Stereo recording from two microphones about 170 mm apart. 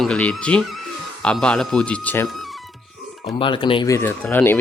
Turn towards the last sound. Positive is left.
turn(degrees=10)  # may be behind; listen again after turning